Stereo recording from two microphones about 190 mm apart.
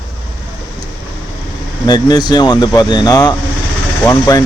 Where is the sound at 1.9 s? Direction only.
20° left (ahead or behind).